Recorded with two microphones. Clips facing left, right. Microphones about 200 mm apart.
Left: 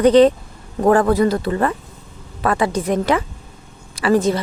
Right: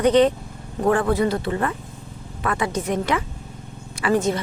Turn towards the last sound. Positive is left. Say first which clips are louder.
# left 4 dB
turn(degrees=35)  # may be behind; listen again after turning